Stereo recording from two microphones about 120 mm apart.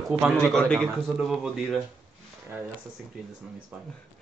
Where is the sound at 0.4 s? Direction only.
5° left (ahead or behind).